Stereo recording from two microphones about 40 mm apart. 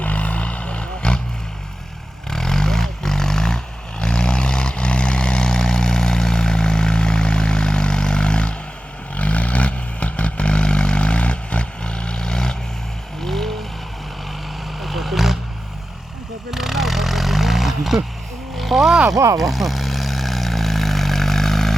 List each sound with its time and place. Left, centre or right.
0.0 s vehicle: left
2.3 s vehicle: centre
14.8 s vehicle: centre
16.5 s vehicle: centre
18.5 s a sound: centre
19.4 s vehicle: centre